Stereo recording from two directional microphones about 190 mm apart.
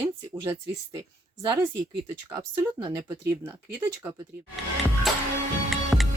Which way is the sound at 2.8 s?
15° right (ahead or behind).